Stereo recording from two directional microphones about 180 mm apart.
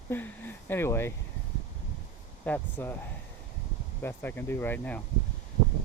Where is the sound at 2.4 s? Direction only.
10° left (ahead or behind).